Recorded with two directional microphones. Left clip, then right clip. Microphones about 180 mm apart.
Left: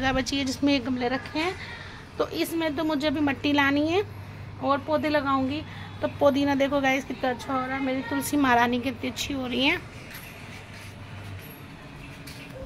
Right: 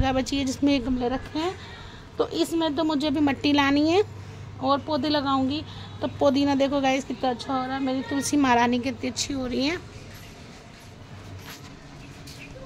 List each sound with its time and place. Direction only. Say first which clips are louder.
0.0 s a woman's voice: right 1 dB; 40° right (ahead or behind)
4.9 s speech: left 1 dB; 10° right (ahead or behind)
5.9 s a woman's voice: even; 40° right (ahead or behind)